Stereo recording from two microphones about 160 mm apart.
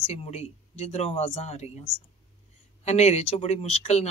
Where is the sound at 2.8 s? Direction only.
40° left (ahead or behind).